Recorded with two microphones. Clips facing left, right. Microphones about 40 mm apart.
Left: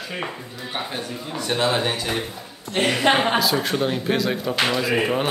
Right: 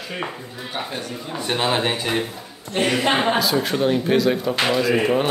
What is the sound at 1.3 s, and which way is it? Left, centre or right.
Speech, right.